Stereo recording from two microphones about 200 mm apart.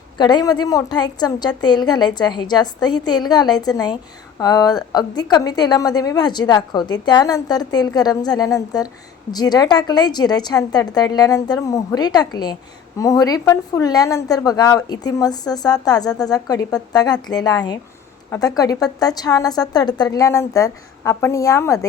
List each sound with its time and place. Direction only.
0.2 s a woman's voice: 20° left (ahead or behind)